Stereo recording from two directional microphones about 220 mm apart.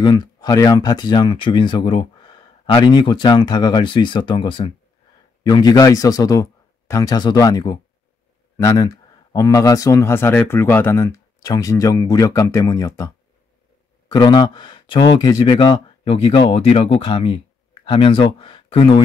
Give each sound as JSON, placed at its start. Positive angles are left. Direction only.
{"t": 0.0, "sound": "speech", "side_deg": 20}